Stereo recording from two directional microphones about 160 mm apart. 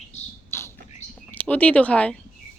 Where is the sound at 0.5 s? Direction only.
15° left (ahead or behind).